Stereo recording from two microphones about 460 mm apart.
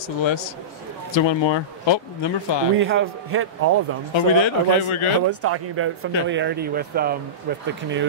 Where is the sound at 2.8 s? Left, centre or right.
Right.